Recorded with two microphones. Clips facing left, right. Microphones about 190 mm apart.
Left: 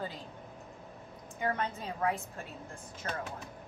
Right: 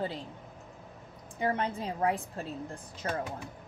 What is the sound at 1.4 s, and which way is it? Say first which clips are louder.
A woman's voice: right 3 dB; 30° right (ahead or behind).